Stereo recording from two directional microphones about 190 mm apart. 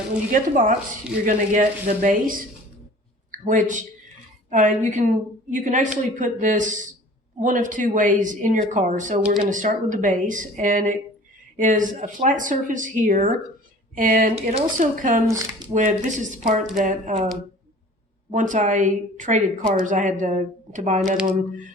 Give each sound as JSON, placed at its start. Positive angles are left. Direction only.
{"t": 0.3, "sound": "speech", "side_deg": -45}
{"t": 3.3, "sound": "a woman's voice", "side_deg": -45}
{"t": 15.3, "sound": "speech", "side_deg": -20}
{"t": 15.7, "sound": "a woman's voice", "side_deg": -40}
{"t": 18.3, "sound": "a woman's voice", "side_deg": -40}